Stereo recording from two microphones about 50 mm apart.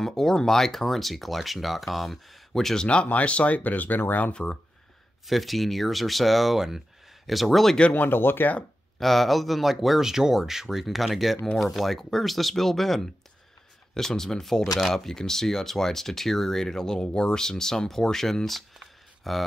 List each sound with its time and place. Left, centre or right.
0.0 s speech: centre; by 4.0 s left
4.3 s speech: left
5.2 s speech: centre
7.9 s speech: left
9.0 s speech: centre